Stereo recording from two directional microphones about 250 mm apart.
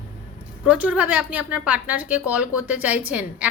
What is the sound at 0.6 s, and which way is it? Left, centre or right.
A woman's voice, centre.